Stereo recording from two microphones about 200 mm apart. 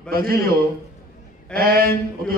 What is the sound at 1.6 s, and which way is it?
Speech, 50° right (ahead or behind).